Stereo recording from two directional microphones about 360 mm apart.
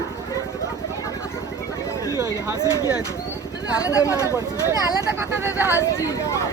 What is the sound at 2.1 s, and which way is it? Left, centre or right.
Speech, centre.